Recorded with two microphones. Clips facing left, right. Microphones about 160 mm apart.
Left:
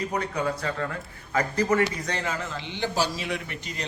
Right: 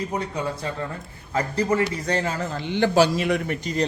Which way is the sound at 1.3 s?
30° right (ahead or behind).